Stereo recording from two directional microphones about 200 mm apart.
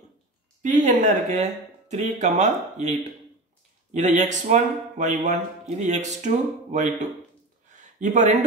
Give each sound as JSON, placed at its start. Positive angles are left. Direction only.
{"t": 0.6, "sound": "speech", "side_deg": -40}